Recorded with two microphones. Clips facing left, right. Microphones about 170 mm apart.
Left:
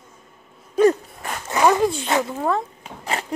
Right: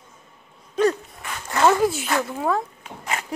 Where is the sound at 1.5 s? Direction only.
15° left (ahead or behind).